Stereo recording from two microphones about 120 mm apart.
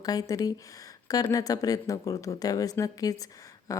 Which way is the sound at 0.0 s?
30° left (ahead or behind).